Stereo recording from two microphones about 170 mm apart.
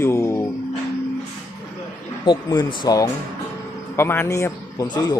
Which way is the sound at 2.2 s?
25° left (ahead or behind).